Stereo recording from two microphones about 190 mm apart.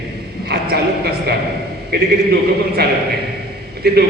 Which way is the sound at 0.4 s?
55° right (ahead or behind).